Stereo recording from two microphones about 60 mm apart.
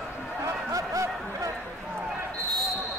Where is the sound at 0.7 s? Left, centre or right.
Right.